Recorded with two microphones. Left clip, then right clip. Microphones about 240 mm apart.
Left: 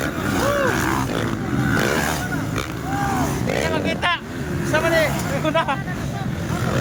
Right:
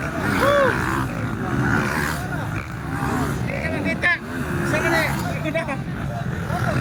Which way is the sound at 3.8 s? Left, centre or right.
Centre.